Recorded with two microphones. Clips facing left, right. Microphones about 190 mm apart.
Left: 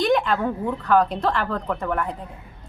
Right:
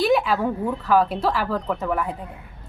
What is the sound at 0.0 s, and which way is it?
A woman's voice, 5° right (ahead or behind).